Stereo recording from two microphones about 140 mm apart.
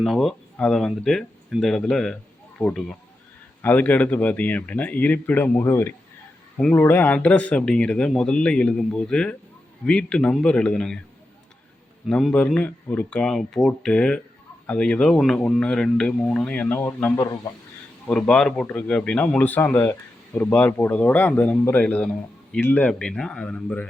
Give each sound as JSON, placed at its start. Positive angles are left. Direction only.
{"t": 0.0, "sound": "speech", "side_deg": 0}
{"t": 12.0, "sound": "speech", "side_deg": 5}